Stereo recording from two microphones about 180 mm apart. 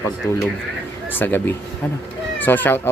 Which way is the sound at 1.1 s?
10° left (ahead or behind).